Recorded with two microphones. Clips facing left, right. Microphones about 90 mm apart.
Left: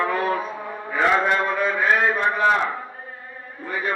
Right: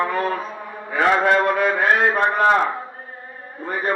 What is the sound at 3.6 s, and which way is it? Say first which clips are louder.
Speech: right 3 dB; 40° right (ahead or behind).